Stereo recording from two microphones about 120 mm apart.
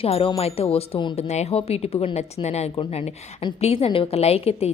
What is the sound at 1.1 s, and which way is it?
A woman's voice, 65° left (ahead or behind).